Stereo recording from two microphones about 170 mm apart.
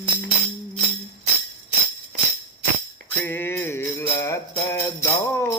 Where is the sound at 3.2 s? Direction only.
15° left (ahead or behind).